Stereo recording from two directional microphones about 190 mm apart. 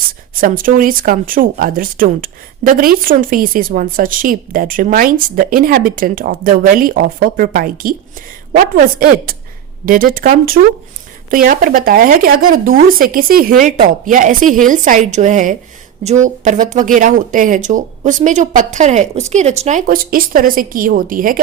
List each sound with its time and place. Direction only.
0.3 s speech: 45° right (ahead or behind)